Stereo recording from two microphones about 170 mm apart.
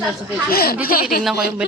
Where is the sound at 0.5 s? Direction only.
60° left (ahead or behind).